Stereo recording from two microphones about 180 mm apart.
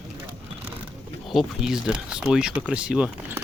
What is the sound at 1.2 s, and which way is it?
Speech, centre (ahead or behind).